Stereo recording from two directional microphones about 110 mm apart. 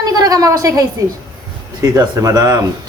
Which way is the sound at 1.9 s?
30° right (ahead or behind).